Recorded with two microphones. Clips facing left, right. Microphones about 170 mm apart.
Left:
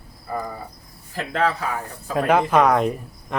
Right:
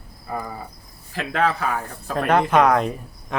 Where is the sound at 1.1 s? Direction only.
75° right (ahead or behind).